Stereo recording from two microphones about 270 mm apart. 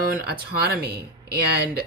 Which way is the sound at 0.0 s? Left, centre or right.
Right.